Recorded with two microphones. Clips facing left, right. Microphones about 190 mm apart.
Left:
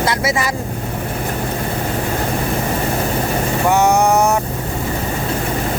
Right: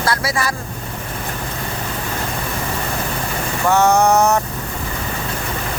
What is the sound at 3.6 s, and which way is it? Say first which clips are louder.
Vehicle: right 1 dB; 15° left (ahead or behind).